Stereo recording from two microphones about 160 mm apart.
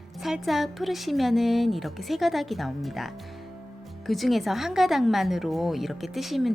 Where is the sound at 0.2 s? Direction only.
Centre (ahead or behind).